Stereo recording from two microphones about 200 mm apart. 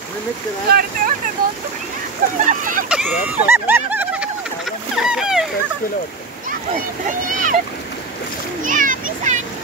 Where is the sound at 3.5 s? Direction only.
10° right (ahead or behind).